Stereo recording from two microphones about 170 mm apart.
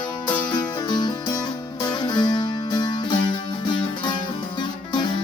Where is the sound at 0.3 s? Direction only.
25° left (ahead or behind).